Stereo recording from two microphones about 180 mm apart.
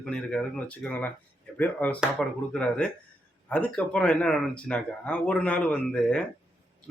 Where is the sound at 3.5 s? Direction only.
5° left (ahead or behind).